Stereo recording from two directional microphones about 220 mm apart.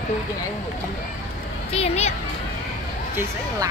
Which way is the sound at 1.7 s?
30° left (ahead or behind).